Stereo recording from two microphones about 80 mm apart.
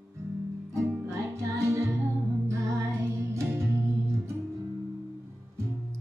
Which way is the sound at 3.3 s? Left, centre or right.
Right.